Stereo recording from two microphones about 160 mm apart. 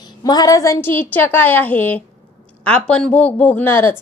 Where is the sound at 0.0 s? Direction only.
25° left (ahead or behind).